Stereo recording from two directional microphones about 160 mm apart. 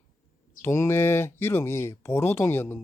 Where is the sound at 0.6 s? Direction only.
15° left (ahead or behind).